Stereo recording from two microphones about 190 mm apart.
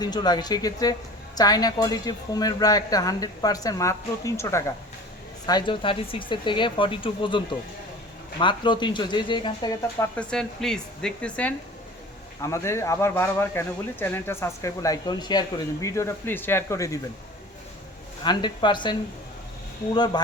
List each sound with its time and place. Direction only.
0.0 s speech: 20° left (ahead or behind)
10.2 s a woman's voice: 5° left (ahead or behind)
18.2 s speech: 25° left (ahead or behind)